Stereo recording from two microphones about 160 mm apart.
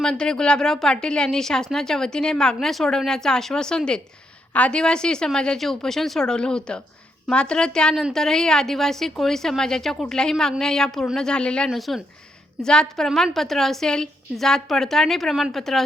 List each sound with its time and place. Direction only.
0.0 s speech: 5° left (ahead or behind)